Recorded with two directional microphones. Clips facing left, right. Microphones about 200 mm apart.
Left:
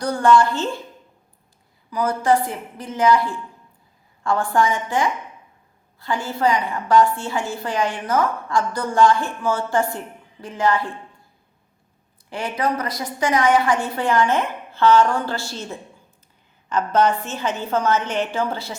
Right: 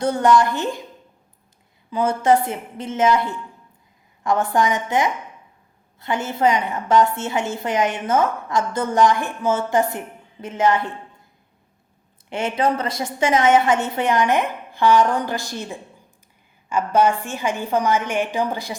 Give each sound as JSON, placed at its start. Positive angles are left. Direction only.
{"t": 0.0, "sound": "a woman's voice", "side_deg": -20}
{"t": 1.9, "sound": "a woman's voice", "side_deg": -25}
{"t": 12.3, "sound": "a woman's voice", "side_deg": -25}